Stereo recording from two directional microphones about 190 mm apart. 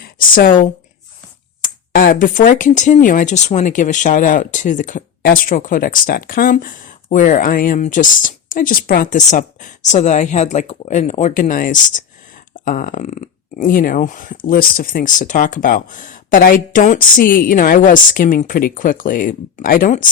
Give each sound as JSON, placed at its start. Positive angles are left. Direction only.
{"t": 0.0, "sound": "speech", "side_deg": 45}